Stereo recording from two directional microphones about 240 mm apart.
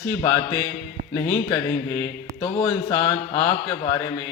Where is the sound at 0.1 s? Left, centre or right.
Centre.